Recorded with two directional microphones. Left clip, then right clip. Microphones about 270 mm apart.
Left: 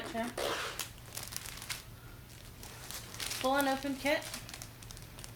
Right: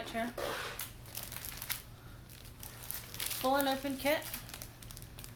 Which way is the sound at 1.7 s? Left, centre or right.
Centre.